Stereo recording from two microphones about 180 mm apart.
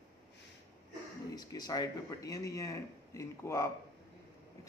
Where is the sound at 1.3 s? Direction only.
20° left (ahead or behind).